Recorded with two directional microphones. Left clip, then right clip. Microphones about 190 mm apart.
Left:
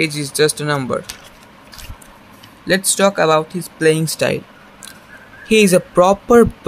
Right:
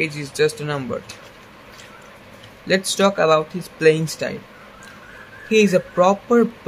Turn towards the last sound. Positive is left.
turn(degrees=30)  # may be behind; listen again after turning